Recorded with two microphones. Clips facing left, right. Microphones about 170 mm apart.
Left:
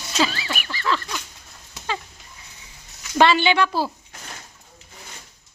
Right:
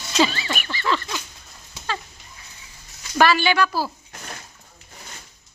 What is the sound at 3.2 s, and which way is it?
Speech, 25° left (ahead or behind).